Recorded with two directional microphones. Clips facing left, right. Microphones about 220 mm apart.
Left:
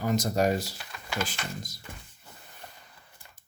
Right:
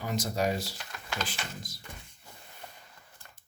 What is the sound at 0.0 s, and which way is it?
Speech, 45° left (ahead or behind).